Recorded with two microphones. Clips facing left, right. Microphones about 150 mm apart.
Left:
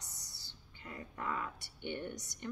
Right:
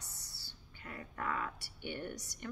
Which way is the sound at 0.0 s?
20° left (ahead or behind).